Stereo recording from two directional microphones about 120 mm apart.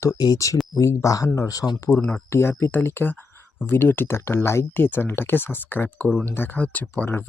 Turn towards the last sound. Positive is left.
turn(degrees=15)  # may be behind; listen again after turning